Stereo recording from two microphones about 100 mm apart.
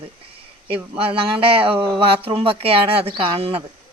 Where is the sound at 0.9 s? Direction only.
70° right (ahead or behind).